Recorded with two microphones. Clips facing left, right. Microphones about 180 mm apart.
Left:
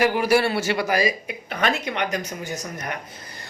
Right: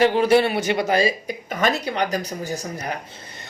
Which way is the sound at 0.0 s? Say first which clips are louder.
Right 3 dB; 25° right (ahead or behind).